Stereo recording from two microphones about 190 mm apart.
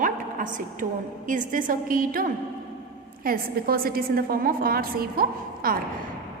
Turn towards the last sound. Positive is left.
turn(degrees=-50)  # may be behind; listen again after turning